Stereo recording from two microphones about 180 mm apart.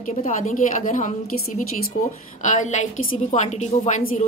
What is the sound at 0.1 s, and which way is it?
A woman's voice, 40° left (ahead or behind).